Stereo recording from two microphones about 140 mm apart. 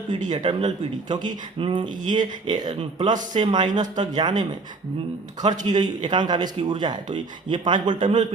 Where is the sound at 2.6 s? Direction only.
60° right (ahead or behind).